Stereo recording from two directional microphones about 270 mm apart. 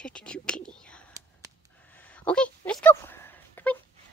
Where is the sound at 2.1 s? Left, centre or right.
Centre.